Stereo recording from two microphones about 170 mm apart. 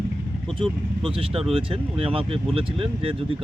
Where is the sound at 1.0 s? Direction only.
30° right (ahead or behind).